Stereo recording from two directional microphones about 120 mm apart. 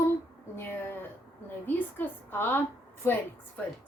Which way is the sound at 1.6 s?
15° left (ahead or behind).